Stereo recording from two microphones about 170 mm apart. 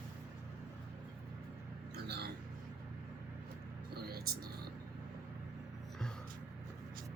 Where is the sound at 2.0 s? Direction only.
75° right (ahead or behind).